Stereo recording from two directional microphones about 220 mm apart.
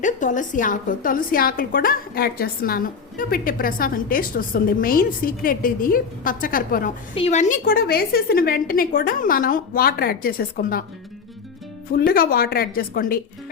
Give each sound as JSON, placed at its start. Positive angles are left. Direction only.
{"t": 0.0, "sound": "a woman's voice", "side_deg": 35}
{"t": 7.1, "sound": "a woman's voice", "side_deg": 25}
{"t": 11.9, "sound": "a woman's voice", "side_deg": 45}